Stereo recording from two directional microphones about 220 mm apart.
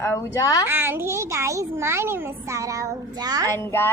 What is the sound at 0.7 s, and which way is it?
A child's voice, 10° right (ahead or behind).